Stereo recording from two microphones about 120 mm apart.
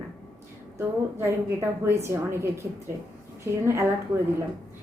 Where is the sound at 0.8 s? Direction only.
20° right (ahead or behind).